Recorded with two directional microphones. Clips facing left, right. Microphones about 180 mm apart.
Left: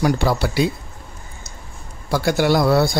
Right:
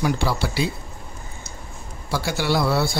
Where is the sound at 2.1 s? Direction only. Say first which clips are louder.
Left 6 dB; 50° left (ahead or behind).